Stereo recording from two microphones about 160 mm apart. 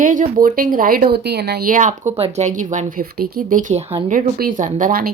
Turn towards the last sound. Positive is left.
turn(degrees=-65)  # may be behind; listen again after turning